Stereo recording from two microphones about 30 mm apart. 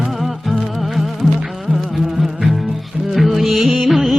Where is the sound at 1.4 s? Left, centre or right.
Centre.